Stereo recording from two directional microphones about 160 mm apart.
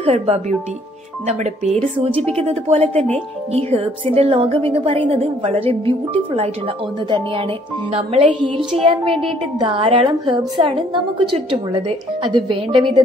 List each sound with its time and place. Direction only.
0.0 s a woman's voice: 40° right (ahead or behind)
4.1 s a woman's voice: 35° right (ahead or behind)
7.9 s a woman's voice: 35° right (ahead or behind)
9.6 s a woman's voice: 35° right (ahead or behind)